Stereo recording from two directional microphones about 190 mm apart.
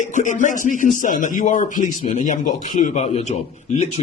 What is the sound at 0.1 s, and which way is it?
A man's voice, 40° left (ahead or behind).